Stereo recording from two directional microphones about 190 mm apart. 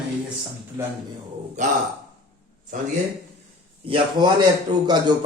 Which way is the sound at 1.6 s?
40° right (ahead or behind).